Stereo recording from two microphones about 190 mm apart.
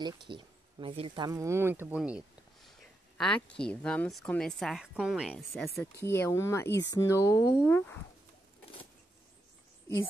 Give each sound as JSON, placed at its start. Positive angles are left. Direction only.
{"t": 0.0, "sound": "a woman's voice", "side_deg": -25}
{"t": 5.8, "sound": "speech", "side_deg": 15}